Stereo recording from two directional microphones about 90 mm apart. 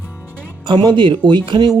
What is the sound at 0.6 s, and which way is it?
Speech, 55° right (ahead or behind).